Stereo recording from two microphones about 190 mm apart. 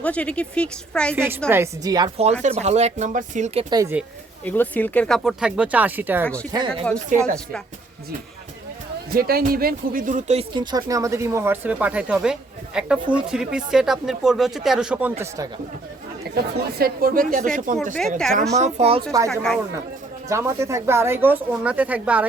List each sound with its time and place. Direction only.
0.0 s a woman's voice: 5° left (ahead or behind)
1.1 s speech: 10° right (ahead or behind)
2.4 s speech: 35° right (ahead or behind)
3.7 s speech: 20° right (ahead or behind)
4.4 s speech: 10° left (ahead or behind); by 6.2 s 10° right (ahead or behind)
6.2 s a woman's voice: 5° left (ahead or behind)
6.5 s speech: 25° right (ahead or behind)
7.1 s speech: 40° right (ahead or behind)
9.1 s speech: 50° right (ahead or behind); by 15.1 s 5° right (ahead or behind)
16.3 s speech: 55° right (ahead or behind)
18.5 s speech: 35° right (ahead or behind)
19.3 s speech: 5° left (ahead or behind)
20.2 s speech: 15° right (ahead or behind)